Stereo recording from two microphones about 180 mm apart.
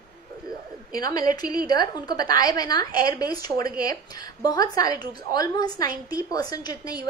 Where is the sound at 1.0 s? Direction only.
20° left (ahead or behind).